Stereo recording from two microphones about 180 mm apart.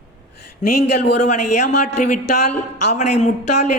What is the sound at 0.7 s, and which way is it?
Speech, 65° left (ahead or behind).